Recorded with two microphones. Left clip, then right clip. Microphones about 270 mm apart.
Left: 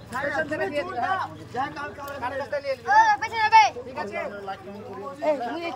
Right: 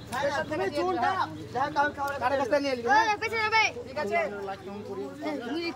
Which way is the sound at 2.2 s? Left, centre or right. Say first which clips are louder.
Right 3 dB; right.